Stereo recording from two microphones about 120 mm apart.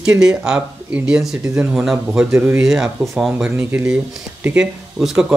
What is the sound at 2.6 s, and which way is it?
Speech, centre (ahead or behind).